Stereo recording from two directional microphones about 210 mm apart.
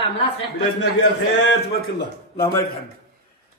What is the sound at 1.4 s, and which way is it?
A man's voice, 55° left (ahead or behind).